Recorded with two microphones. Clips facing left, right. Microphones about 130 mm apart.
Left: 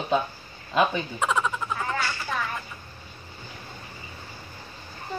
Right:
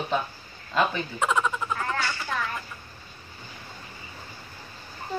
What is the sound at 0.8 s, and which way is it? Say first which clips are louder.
Speech: left 2 dB; 15° left (ahead or behind).